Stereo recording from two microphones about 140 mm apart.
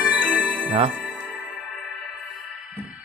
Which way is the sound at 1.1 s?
Centre (ahead or behind).